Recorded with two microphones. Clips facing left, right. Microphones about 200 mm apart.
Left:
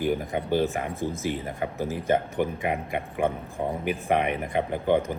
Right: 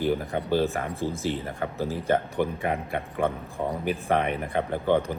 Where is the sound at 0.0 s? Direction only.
15° left (ahead or behind).